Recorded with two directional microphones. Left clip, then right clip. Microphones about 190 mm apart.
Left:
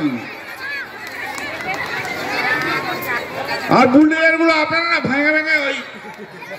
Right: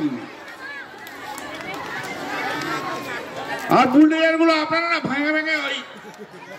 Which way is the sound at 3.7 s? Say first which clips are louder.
Left 3 dB; 60° left (ahead or behind).